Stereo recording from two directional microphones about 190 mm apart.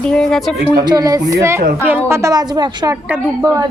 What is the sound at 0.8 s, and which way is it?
A woman's voice, 20° right (ahead or behind).